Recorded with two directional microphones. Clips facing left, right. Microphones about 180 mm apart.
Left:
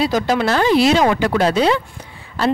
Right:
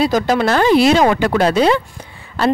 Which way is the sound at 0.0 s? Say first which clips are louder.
Right 2 dB; 45° right (ahead or behind).